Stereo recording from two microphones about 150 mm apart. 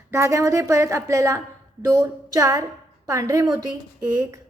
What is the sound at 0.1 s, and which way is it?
A woman's voice, 20° right (ahead or behind).